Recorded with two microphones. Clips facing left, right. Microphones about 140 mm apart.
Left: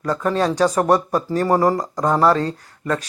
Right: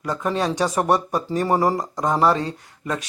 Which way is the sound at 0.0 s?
10° right (ahead or behind).